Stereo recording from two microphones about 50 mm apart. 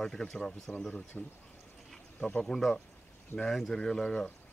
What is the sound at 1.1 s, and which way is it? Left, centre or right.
Speech, left.